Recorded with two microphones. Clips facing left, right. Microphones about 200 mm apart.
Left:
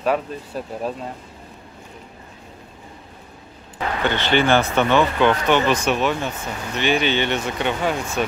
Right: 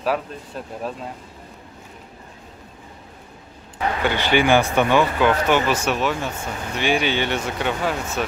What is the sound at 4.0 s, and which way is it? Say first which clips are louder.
Speech: even; 10° right (ahead or behind).